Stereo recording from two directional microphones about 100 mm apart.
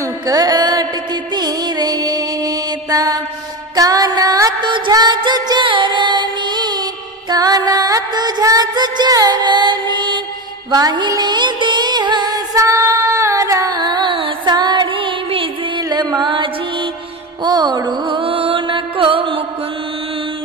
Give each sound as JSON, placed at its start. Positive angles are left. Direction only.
{"t": 0.0, "sound": "mantra", "side_deg": -40}
{"t": 1.3, "sound": "music", "side_deg": -40}
{"t": 4.6, "sound": "music", "side_deg": -55}
{"t": 15.9, "sound": "music", "side_deg": -45}